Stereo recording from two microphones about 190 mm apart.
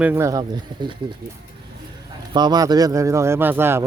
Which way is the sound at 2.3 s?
20° right (ahead or behind).